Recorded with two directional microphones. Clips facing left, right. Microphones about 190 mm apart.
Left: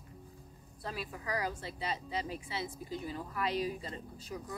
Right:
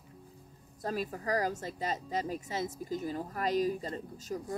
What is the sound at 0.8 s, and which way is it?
A woman's voice, 45° right (ahead or behind).